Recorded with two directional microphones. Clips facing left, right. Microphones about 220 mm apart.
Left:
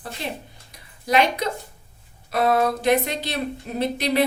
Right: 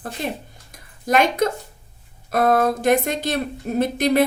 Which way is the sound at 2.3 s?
50° right (ahead or behind).